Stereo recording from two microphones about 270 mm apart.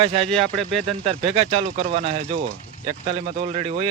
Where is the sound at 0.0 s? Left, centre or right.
Right.